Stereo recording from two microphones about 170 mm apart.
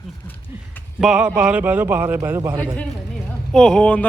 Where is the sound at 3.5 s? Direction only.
5° left (ahead or behind).